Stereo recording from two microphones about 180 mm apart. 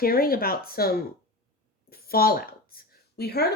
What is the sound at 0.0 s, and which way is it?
A woman's voice, 55° left (ahead or behind).